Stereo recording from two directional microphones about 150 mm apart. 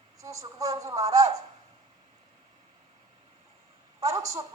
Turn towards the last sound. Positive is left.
turn(degrees=-20)  # may be behind; listen again after turning